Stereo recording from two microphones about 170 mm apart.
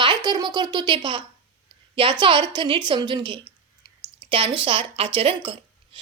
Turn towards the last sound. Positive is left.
turn(degrees=-35)  # may be behind; listen again after turning